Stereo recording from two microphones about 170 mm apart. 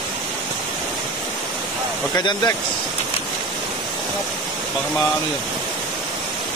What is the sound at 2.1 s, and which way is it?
Speech, 25° left (ahead or behind).